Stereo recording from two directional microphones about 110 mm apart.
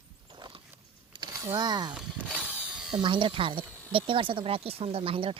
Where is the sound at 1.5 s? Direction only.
40° right (ahead or behind).